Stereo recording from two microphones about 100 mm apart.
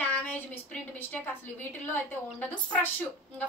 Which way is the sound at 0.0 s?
15° left (ahead or behind).